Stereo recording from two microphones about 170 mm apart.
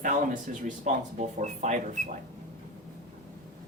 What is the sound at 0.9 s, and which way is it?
Speech, 45° right (ahead or behind).